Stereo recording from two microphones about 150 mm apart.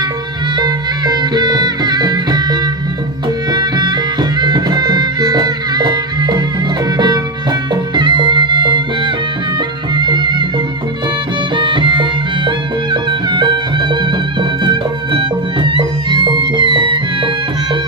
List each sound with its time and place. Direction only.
0.5 s music: 30° right (ahead or behind)
11.5 s music: 35° right (ahead or behind)